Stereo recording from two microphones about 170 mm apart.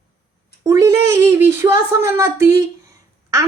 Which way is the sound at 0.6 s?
15° right (ahead or behind).